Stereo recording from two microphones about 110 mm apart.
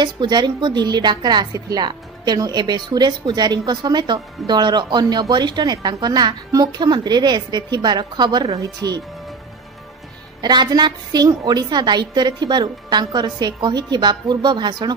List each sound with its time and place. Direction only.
0.0 s a woman's voice: 45° right (ahead or behind)
10.4 s a woman's voice: 40° right (ahead or behind)